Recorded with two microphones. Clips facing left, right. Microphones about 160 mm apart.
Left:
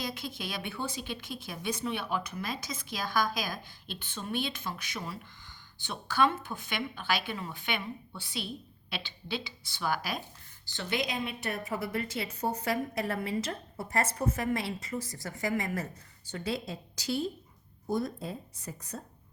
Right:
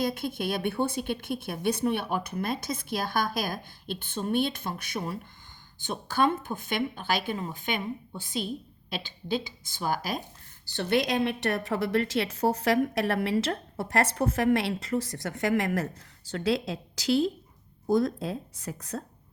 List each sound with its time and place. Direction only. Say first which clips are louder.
0.0 s a woman's voice: right 8 dB; 55° right (ahead or behind)
10.8 s a woman's voice: right 8 dB; 60° right (ahead or behind); by 19.0 s 90° right